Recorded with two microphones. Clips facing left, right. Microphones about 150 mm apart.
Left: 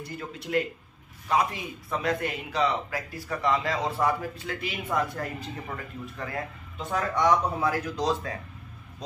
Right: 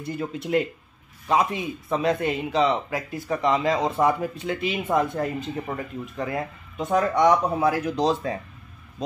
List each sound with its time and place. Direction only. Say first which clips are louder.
0.0 s speech: right 7 dB; 20° right (ahead or behind)